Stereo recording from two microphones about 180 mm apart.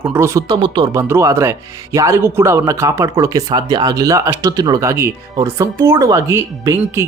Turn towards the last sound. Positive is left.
turn(degrees=-15)  # may be behind; listen again after turning